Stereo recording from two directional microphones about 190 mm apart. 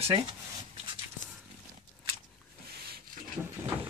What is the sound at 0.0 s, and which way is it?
Speech, 30° right (ahead or behind).